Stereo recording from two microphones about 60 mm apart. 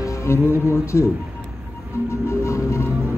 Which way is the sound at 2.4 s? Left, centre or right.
Left.